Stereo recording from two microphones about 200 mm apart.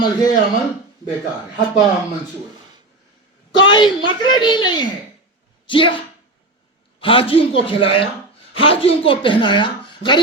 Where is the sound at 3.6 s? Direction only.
25° left (ahead or behind).